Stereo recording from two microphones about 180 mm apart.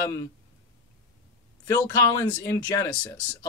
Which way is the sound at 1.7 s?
15° left (ahead or behind).